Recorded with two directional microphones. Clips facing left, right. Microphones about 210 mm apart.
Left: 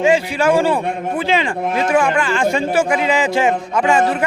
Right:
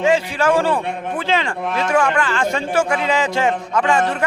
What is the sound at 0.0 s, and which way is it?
A man's voice, 10° left (ahead or behind).